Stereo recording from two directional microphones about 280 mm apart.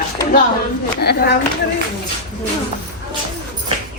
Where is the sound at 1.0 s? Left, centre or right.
Left.